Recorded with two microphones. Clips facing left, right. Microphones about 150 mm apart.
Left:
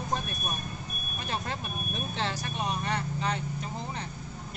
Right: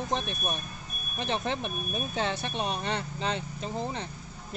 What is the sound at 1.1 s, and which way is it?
Speech, 20° right (ahead or behind).